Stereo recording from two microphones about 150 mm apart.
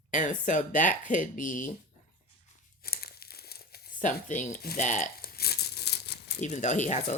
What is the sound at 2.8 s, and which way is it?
Crumpling, 90° left.